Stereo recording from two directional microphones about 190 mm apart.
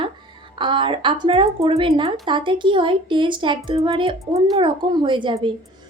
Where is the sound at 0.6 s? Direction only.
25° right (ahead or behind).